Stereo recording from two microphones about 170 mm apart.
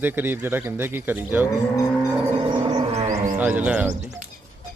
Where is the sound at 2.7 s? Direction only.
40° right (ahead or behind).